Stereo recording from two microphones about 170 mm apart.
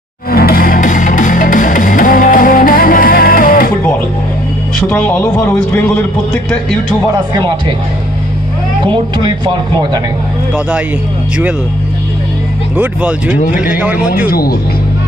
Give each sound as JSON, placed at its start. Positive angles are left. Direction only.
{"t": 0.3, "sound": "music", "side_deg": 60}
{"t": 4.8, "sound": "a man's voice", "side_deg": 10}
{"t": 8.9, "sound": "speech", "side_deg": -25}
{"t": 10.5, "sound": "speech", "side_deg": -5}
{"t": 12.7, "sound": "speech", "side_deg": -10}
{"t": 13.3, "sound": "speech", "side_deg": 50}
{"t": 13.7, "sound": "speech", "side_deg": -10}
{"t": 14.3, "sound": "speech", "side_deg": 60}